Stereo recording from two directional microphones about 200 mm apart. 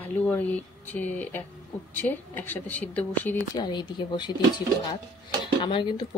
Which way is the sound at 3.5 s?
20° left (ahead or behind).